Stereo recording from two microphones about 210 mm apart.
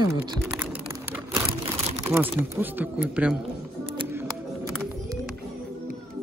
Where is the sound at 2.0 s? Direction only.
10° right (ahead or behind).